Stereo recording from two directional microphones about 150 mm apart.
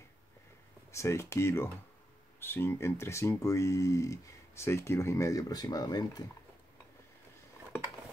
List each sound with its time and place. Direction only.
0.9 s speech: 20° left (ahead or behind)